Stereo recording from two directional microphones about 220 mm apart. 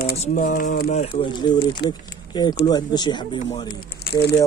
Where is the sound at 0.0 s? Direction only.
40° left (ahead or behind).